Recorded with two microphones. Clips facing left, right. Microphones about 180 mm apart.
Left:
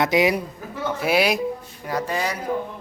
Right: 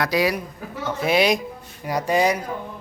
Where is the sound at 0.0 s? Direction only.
20° left (ahead or behind).